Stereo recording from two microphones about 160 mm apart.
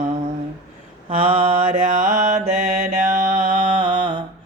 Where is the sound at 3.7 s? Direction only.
30° right (ahead or behind).